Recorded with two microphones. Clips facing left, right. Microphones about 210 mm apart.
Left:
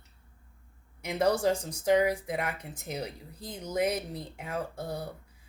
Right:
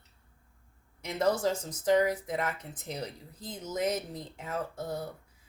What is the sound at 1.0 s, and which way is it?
Speech, 15° left (ahead or behind).